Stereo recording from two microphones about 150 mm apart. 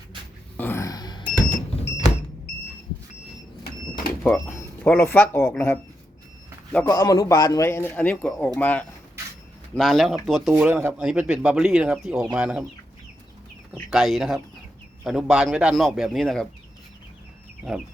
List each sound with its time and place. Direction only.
0.5 s a sound: 15° left (ahead or behind); by 1.3 s 30° left (ahead or behind)
4.2 s a sound: 5° left (ahead or behind)
4.5 s speech: 10° left (ahead or behind)
6.8 s a man's voice: 20° left (ahead or behind)
9.7 s speech: centre (ahead or behind)
10.6 s speech: 15° right (ahead or behind)
13.9 s speech: centre (ahead or behind)